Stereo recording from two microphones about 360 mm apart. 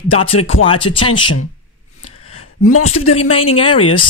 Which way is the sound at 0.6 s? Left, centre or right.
Centre.